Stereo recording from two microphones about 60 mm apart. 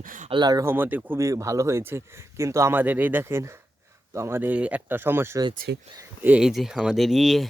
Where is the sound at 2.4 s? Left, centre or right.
Right.